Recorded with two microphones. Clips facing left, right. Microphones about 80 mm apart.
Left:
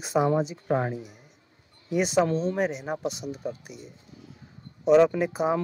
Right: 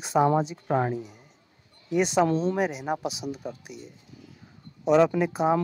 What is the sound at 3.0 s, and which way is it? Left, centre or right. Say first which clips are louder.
Speech: even; left.